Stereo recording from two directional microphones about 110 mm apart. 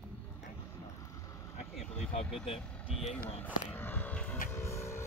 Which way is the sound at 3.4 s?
15° left (ahead or behind).